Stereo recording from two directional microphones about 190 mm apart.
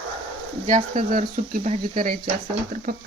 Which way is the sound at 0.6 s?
45° right (ahead or behind).